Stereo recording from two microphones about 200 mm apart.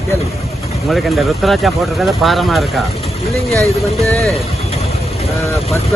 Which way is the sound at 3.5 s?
15° right (ahead or behind).